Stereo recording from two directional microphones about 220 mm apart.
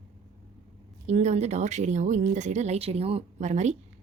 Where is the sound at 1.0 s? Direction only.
30° right (ahead or behind).